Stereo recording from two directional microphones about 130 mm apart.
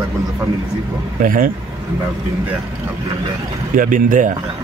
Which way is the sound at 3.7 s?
90° right.